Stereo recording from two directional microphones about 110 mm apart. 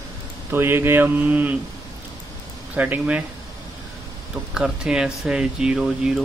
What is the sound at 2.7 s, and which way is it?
Speech, 15° right (ahead or behind).